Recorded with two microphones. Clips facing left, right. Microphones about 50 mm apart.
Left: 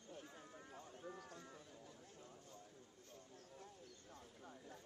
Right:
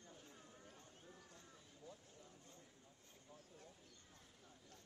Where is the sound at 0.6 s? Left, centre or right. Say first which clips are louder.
Left 7 dB; left.